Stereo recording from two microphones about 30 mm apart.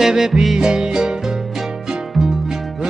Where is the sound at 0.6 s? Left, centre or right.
Right.